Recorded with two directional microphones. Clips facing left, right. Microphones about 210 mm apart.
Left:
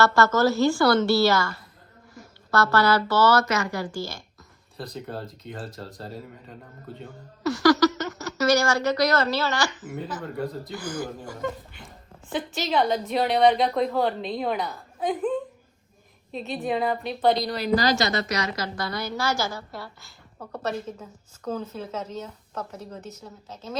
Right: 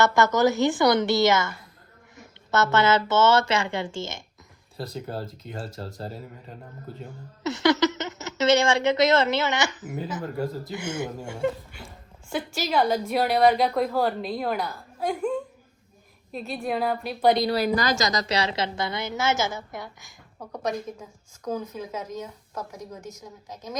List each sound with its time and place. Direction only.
0.0 s a woman's voice: 20° right (ahead or behind)
5.2 s a woman's voice: centre (ahead or behind)
7.4 s speech: 20° right (ahead or behind)
10.2 s a woman's voice: centre (ahead or behind)
10.8 s speech: 25° right (ahead or behind)
12.3 s a woman's voice: centre (ahead or behind)
17.6 s a woman's voice: 45° right (ahead or behind)
18.3 s a woman's voice: 30° right (ahead or behind); by 23.7 s 10° right (ahead or behind)